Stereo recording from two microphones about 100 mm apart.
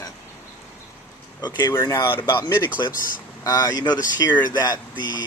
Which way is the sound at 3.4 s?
40° left (ahead or behind).